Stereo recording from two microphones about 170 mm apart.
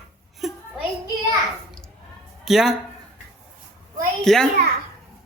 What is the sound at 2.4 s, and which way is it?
Speech, centre (ahead or behind).